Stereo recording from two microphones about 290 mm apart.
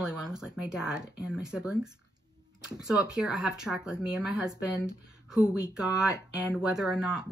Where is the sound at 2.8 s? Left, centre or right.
Centre.